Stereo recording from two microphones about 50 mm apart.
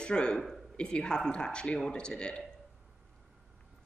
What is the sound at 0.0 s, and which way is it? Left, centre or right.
A man's voice, centre.